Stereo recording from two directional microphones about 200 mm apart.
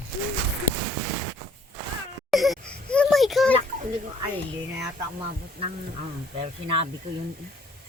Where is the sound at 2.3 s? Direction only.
Centre (ahead or behind).